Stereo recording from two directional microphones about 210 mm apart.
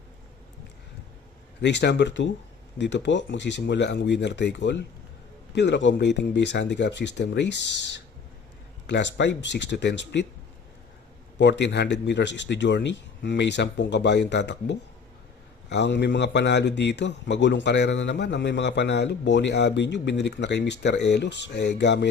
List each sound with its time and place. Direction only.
1.6 s a man's voice: 55° left (ahead or behind)
11.3 s a man's voice: 55° left (ahead or behind)